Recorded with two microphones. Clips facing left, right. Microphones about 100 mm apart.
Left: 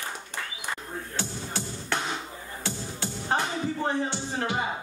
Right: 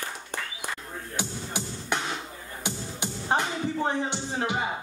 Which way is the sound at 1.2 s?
15° right (ahead or behind).